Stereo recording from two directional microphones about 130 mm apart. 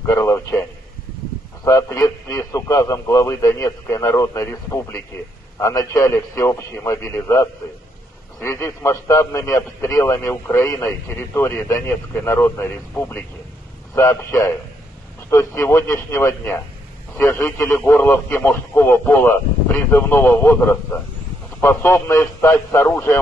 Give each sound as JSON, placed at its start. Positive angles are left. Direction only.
{"t": 0.0, "sound": "a sound", "side_deg": 20}
{"t": 1.6, "sound": "speech", "side_deg": 20}
{"t": 15.2, "sound": "speech", "side_deg": 20}